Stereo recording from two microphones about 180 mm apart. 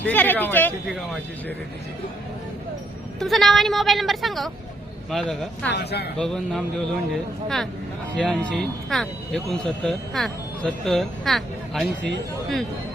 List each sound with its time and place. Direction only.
0.0 s speech: 10° left (ahead or behind)
3.2 s speech: centre (ahead or behind)
5.7 s speech: 65° left (ahead or behind)
6.1 s speech: 5° left (ahead or behind)